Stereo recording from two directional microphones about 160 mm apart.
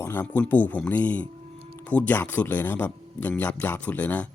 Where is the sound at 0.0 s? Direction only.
10° left (ahead or behind).